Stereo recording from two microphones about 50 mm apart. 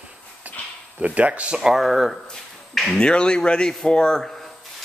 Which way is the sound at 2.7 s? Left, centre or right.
Centre.